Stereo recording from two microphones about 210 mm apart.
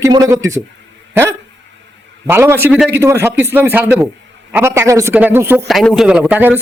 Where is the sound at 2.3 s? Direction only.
10° right (ahead or behind).